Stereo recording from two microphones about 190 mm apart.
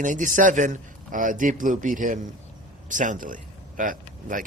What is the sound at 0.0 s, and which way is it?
A man's voice, 40° right (ahead or behind).